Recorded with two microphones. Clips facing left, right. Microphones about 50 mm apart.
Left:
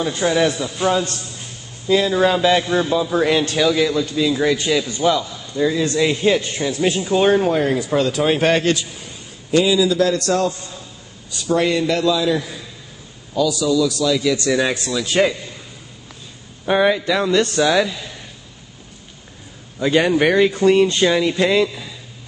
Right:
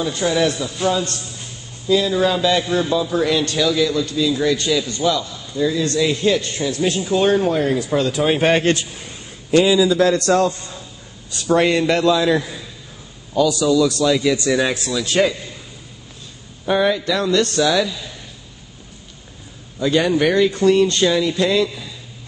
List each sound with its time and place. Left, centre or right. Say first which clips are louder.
0.0 s a man's voice: left 1 dB; left
1.9 s a man's voice: left 1 dB; left
3.2 s a man's voice: left 3 dB; left; by 8.0 s centre
8.0 s speech: left 1 dB; centre
8.7 s a man's voice: right 1 dB; right
14.0 s speech: right 1 dB; right
14.5 s speech: even; centre
16.6 s a man's voice: left 1 dB; left
19.8 s a man's voice: left 1 dB; left